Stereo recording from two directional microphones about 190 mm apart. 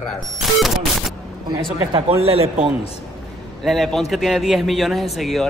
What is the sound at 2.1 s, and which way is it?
Speech, 30° right (ahead or behind).